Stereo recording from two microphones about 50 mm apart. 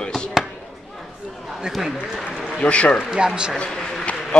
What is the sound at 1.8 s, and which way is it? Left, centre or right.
Speech, centre.